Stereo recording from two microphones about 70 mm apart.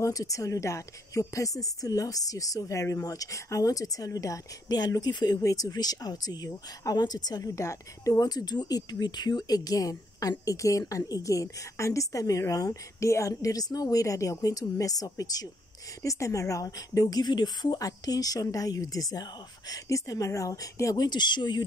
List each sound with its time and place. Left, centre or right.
0.0 s speech: left
7.4 s speech: left
17.7 s speech: left
19.7 s speech: left
21.0 s speech: left